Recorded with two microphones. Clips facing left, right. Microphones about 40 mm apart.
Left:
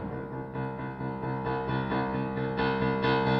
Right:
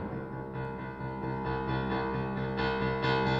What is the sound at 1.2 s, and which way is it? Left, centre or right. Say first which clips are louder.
Music: left 2 dB; centre.